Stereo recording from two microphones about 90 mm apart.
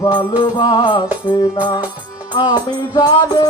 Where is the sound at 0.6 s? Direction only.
40° left (ahead or behind).